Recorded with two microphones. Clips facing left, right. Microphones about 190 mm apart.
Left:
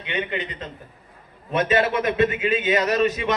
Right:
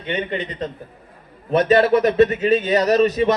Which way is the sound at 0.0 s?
40° right (ahead or behind).